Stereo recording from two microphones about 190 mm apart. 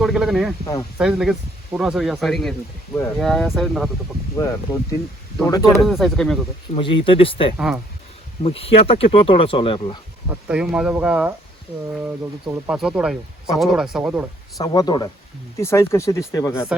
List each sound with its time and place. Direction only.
0.0 s speech: centre (ahead or behind)
0.6 s speech: 20° left (ahead or behind)
0.9 s speech: 5° right (ahead or behind)
4.4 s speech: 15° left (ahead or behind)
5.8 s speech: centre (ahead or behind)
6.7 s speech: 25° left (ahead or behind)
10.5 s speech: 5° right (ahead or behind)
14.6 s speech: 20° left (ahead or behind)